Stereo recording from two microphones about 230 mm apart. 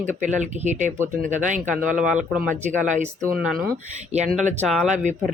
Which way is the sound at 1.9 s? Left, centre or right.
Centre.